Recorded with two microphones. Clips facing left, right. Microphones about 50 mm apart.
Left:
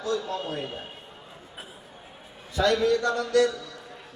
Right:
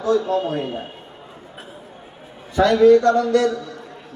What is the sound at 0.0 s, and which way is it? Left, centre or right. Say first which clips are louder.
Speech: right 10 dB; right.